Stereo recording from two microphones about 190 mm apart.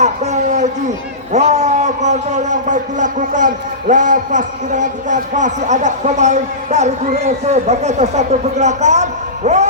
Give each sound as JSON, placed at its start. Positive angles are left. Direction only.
{"t": 0.0, "sound": "a man's voice", "side_deg": -35}